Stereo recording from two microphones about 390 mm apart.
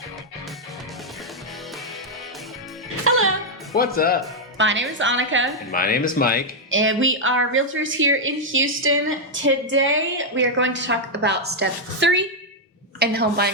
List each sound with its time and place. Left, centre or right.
3.0 s music: right
3.8 s speech: left
4.5 s speech: right
5.7 s speech: left
6.7 s speech: right